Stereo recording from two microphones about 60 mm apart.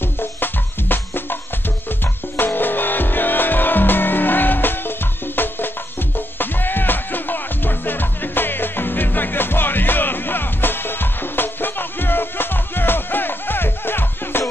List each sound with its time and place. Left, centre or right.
0.2 s music: left